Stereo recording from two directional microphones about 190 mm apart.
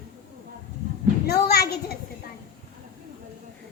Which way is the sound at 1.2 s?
55° left (ahead or behind).